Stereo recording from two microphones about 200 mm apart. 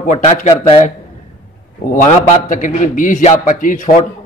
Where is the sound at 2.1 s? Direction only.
40° left (ahead or behind).